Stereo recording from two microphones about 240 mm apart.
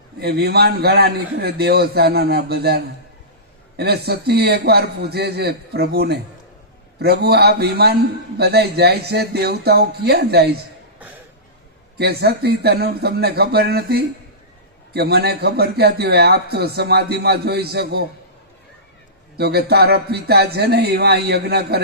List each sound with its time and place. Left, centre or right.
0.2 s a man's voice: right
11.9 s a man's voice: right
19.4 s a man's voice: right